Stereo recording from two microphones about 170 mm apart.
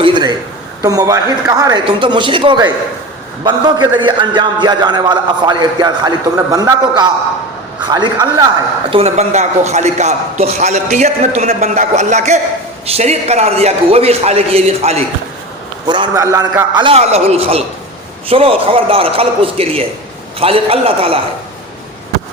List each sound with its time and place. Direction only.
0.0 s a sound: 25° right (ahead or behind)
0.8 s a man's voice: 20° right (ahead or behind)
8.9 s a man's voice: 35° right (ahead or behind)
15.9 s a man's voice: 25° right (ahead or behind)